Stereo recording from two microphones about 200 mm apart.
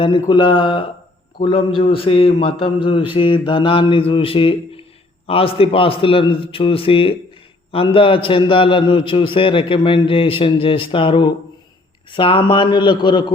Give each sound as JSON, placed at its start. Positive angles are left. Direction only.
{"t": 0.0, "sound": "a man's voice", "side_deg": 25}